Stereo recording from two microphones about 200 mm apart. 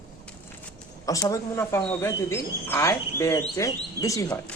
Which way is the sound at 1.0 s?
15° left (ahead or behind).